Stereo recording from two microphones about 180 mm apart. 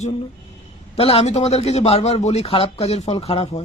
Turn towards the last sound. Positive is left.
turn(degrees=35)  # may be behind; listen again after turning